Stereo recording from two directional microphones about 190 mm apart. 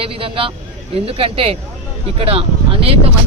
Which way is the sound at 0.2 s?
30° right (ahead or behind).